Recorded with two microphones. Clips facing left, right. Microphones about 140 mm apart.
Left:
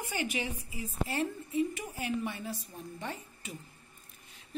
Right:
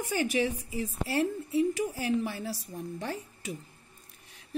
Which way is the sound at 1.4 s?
80° right.